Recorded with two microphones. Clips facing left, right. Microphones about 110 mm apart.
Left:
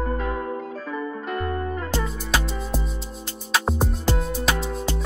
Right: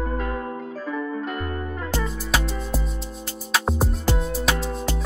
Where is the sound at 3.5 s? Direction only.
Centre (ahead or behind).